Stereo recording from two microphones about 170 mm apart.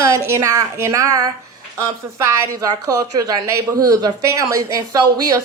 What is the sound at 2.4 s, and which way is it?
A woman's voice, 20° right (ahead or behind).